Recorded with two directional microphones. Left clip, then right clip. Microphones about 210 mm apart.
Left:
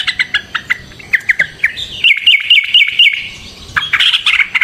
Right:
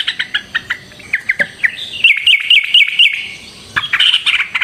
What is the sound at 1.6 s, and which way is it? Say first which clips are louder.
Chirp: right 2 dB; centre (ahead or behind).